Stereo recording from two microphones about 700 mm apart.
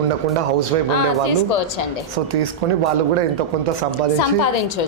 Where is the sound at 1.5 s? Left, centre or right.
Left.